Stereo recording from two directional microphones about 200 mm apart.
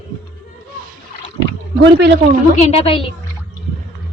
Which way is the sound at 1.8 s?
60° right (ahead or behind).